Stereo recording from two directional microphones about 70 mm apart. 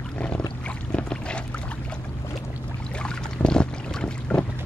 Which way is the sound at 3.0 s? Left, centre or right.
Centre.